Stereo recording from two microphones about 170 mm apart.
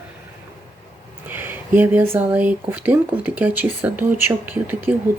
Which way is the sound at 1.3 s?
10° right (ahead or behind).